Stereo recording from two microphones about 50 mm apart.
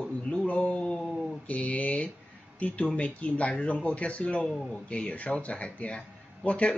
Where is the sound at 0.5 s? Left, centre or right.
Left.